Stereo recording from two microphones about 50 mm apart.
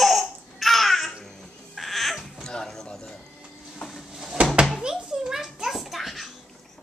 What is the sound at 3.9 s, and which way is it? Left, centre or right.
Drawer open or close, centre.